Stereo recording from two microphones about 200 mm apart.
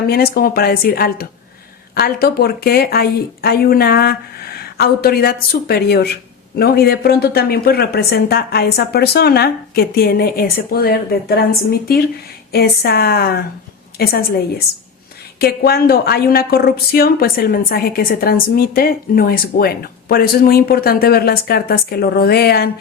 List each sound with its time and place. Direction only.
0.1 s a woman's voice: 50° left (ahead or behind)